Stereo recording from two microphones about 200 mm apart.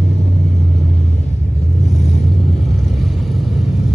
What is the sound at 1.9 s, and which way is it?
Vehicle, 35° left (ahead or behind).